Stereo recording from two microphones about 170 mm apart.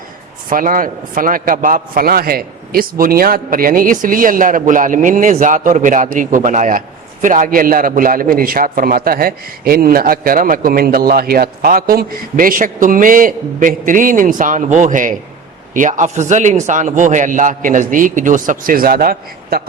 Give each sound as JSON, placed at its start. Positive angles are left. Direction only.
{"t": 0.5, "sound": "a man's voice", "side_deg": -55}